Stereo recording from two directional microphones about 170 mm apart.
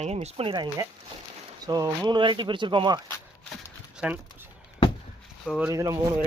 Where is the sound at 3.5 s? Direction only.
5° right (ahead or behind).